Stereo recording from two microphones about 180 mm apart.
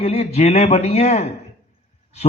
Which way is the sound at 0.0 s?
35° left (ahead or behind).